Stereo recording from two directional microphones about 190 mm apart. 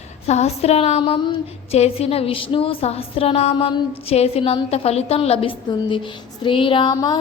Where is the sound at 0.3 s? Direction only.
35° left (ahead or behind).